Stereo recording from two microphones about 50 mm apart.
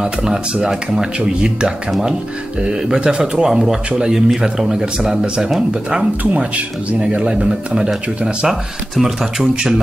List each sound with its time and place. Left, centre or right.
0.0 s speech: centre
5.9 s speech: right